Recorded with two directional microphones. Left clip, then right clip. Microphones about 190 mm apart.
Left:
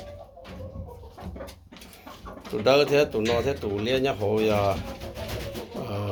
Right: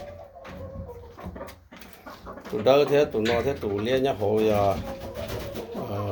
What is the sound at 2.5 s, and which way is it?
Speech, 5° right (ahead or behind).